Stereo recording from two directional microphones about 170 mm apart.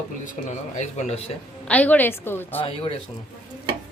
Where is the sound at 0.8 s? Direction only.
40° left (ahead or behind).